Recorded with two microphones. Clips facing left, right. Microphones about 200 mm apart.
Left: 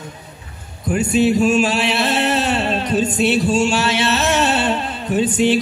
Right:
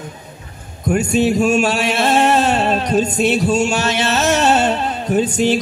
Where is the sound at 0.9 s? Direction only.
45° right (ahead or behind).